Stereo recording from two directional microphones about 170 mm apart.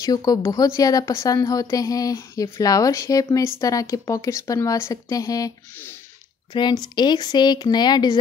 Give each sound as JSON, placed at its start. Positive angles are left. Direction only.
{"t": 0.0, "sound": "a woman's voice", "side_deg": 20}